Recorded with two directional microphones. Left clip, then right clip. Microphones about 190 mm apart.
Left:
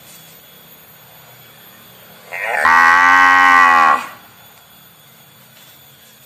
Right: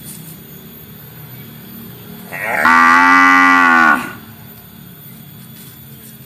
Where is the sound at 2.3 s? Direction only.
20° left (ahead or behind).